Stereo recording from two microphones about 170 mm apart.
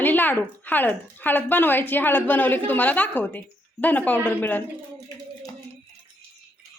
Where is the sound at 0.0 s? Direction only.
10° left (ahead or behind).